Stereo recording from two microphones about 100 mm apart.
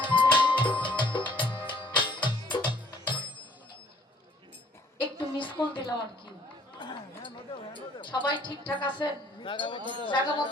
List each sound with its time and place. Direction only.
0.0 s music: 55° left (ahead or behind)
5.4 s music: 55° left (ahead or behind)
6.7 s speech: 55° left (ahead or behind)